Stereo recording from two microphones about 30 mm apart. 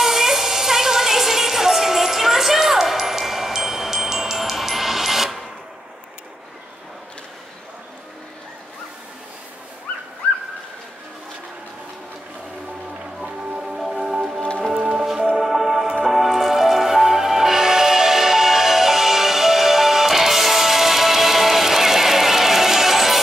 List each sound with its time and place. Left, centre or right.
0.0 s music: centre
13.6 s music: centre